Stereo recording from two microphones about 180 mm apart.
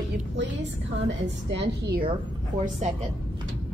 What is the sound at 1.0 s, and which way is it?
A woman's voice, 75° right (ahead or behind).